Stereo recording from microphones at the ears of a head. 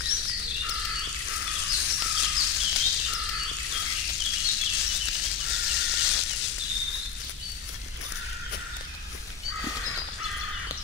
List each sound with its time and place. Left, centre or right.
0.0 s frog: left